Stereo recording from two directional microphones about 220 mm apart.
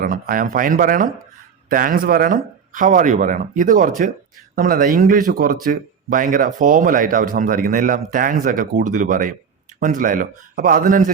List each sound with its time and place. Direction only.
0.0 s speech: 40° right (ahead or behind)